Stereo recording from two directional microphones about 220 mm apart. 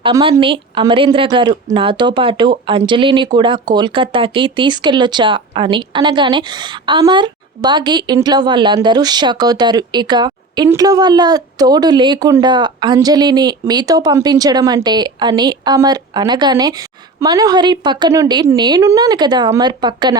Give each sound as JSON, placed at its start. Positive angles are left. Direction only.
{"t": 0.0, "sound": "speech", "side_deg": -25}